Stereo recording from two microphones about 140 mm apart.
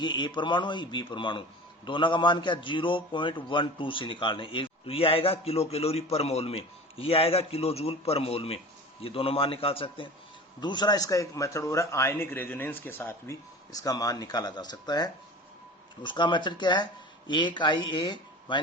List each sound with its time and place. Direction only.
0.0 s a man's voice: 35° left (ahead or behind)
10.6 s speech: 30° left (ahead or behind); by 13.3 s 15° left (ahead or behind)
13.7 s a man's voice: 25° left (ahead or behind)